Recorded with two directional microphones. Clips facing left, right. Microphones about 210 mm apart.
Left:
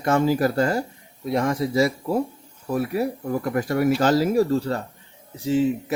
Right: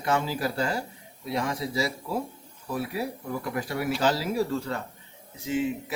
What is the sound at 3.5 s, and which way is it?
Speech, 50° left (ahead or behind).